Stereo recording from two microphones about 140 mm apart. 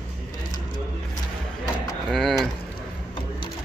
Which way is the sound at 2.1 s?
Centre (ahead or behind).